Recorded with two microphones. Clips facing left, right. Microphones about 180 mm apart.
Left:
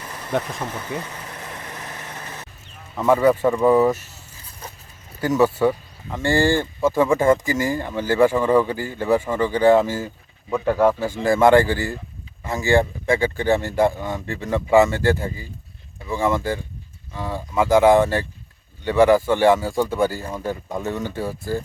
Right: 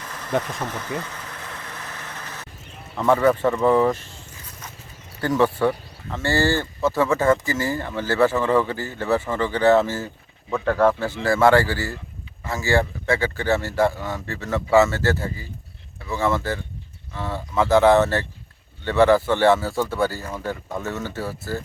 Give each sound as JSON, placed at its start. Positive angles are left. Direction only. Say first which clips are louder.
{"t": 0.0, "sound": "vehicle", "louder": "even", "side_deg": 10}
{"t": 2.9, "sound": "speech", "louder": "left 1 dB", "side_deg": 10}
{"t": 5.2, "sound": "speech", "louder": "left 2 dB", "side_deg": 10}